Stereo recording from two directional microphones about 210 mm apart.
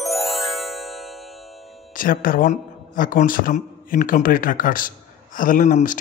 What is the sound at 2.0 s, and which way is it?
A man's voice, 40° left (ahead or behind).